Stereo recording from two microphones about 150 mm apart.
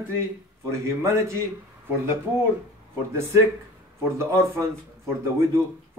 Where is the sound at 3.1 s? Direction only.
20° right (ahead or behind).